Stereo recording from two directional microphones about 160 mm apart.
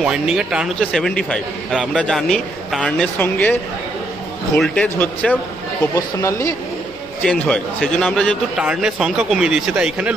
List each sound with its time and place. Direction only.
0.0 s a man's voice: 5° right (ahead or behind)
4.6 s speech: 5° left (ahead or behind)
7.2 s a man's voice: 5° left (ahead or behind)